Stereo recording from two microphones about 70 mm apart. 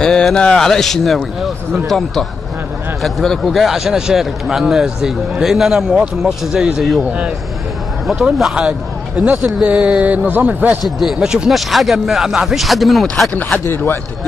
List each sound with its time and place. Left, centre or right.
0.0 s a man's voice: centre
7.0 s speech: centre
8.1 s a man's voice: centre; by 10.8 s right
11.0 s a man's voice: centre
13.3 s speech: left